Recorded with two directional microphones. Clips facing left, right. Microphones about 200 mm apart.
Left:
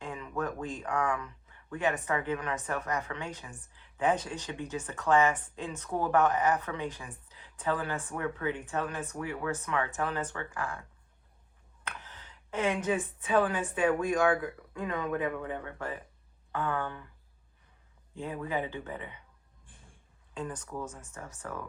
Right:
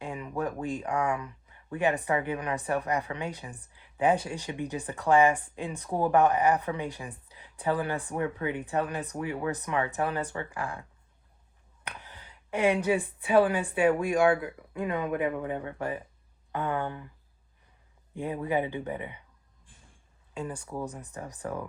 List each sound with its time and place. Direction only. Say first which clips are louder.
0.0 s a sound: right 3 dB; 15° right (ahead or behind)
1.7 s speech: right 4 dB; 15° right (ahead or behind)
11.8 s a woman's voice: right 1 dB; 15° right (ahead or behind)
18.1 s speech: right 5 dB; 15° right (ahead or behind)
20.3 s speech: right 2 dB; 10° right (ahead or behind)